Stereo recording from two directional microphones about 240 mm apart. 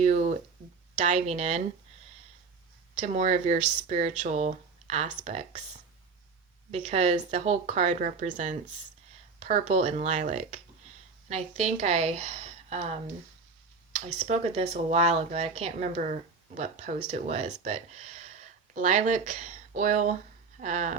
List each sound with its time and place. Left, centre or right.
0.0 s a sound: right
0.9 s speech: right
2.9 s speech: right
6.7 s a woman's voice: right
14.3 s speech: right